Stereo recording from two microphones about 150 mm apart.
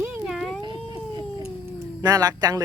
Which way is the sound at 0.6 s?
30° right (ahead or behind).